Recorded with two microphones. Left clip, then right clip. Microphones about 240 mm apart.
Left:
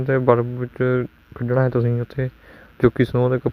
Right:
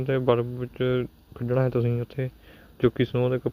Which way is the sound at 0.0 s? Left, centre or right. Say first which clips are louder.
Left 6 dB; left.